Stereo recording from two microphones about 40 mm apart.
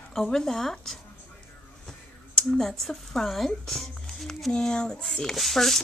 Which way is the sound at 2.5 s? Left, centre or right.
Centre.